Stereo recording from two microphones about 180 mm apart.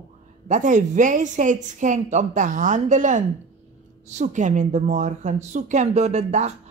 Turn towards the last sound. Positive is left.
turn(degrees=-40)  # may be behind; listen again after turning